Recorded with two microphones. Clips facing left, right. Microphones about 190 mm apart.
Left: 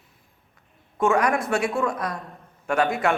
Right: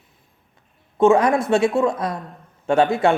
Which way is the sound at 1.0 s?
25° right (ahead or behind).